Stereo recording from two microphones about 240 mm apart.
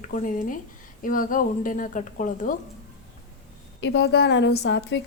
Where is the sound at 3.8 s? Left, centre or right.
Left.